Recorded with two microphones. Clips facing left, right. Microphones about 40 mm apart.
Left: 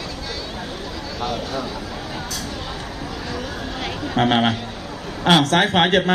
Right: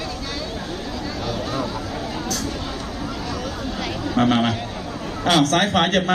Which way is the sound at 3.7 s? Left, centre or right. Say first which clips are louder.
Even; left.